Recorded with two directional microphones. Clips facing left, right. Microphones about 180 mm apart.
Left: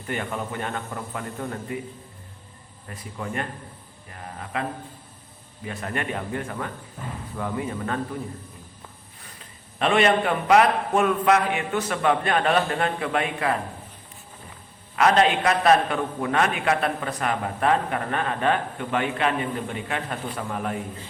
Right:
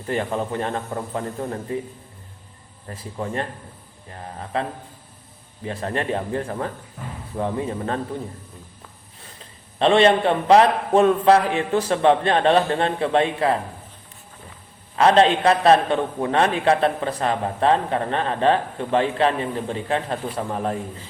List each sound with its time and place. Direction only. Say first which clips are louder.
0.1 s a man's voice: right 5 dB; 30° right (ahead or behind)
2.9 s a man's voice: right 4 dB; 30° right (ahead or behind)
5.6 s a man's voice: right 4 dB; 30° right (ahead or behind)
9.7 s a man's voice: right 4 dB; 30° right (ahead or behind)
14.9 s a man's voice: right 4 dB; 30° right (ahead or behind)